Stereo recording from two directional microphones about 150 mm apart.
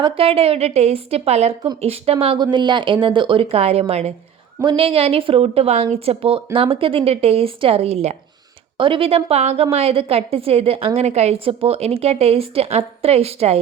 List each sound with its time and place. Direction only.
0.0 s a woman's voice: 40° right (ahead or behind)